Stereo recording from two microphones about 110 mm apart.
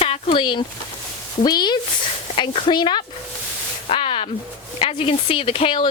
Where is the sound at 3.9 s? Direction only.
60° left (ahead or behind).